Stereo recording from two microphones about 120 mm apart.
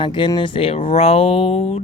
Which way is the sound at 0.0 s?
40° left (ahead or behind).